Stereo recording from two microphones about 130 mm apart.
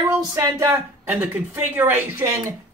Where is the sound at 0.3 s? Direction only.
20° right (ahead or behind).